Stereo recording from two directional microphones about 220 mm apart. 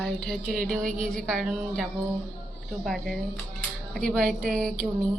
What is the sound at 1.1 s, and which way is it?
Speech, centre (ahead or behind).